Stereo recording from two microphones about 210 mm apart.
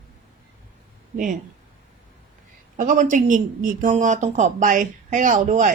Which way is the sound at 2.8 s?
35° right (ahead or behind).